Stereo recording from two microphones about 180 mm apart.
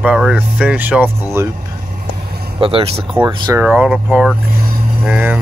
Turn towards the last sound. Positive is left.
turn(degrees=-5)  # may be behind; listen again after turning